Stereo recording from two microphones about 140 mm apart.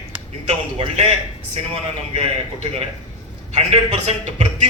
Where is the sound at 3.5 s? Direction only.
50° right (ahead or behind).